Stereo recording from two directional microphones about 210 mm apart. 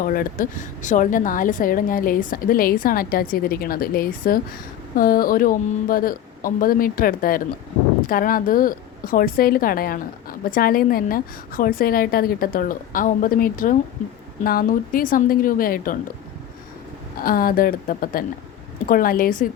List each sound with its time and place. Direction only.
0.0 s a woman's voice: 45° left (ahead or behind)
17.2 s a woman's voice: 45° left (ahead or behind)